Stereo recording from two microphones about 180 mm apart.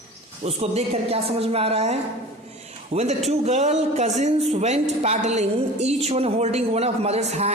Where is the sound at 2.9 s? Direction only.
35° right (ahead or behind).